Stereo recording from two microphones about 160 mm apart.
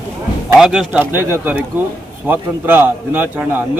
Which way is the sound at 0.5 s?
5° right (ahead or behind).